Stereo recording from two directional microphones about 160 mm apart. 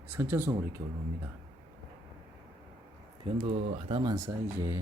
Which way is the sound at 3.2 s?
35° right (ahead or behind).